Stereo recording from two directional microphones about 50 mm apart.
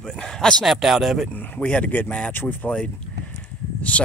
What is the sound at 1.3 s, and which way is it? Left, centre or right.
Speech, left.